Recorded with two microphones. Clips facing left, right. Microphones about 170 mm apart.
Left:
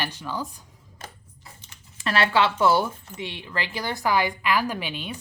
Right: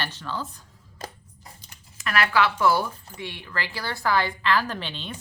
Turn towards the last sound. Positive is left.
turn(degrees=10)  # may be behind; listen again after turning